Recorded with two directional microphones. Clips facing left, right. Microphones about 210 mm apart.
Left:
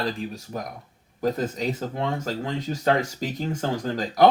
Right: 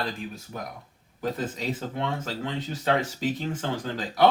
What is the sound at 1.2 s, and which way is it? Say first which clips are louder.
Speech: left 5 dB; 45° left (ahead or behind).